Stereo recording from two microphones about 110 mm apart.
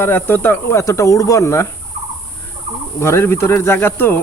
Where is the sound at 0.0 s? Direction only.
20° left (ahead or behind).